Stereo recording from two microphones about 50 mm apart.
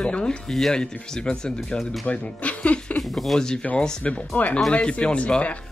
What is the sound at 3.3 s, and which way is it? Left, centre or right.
Speech, centre.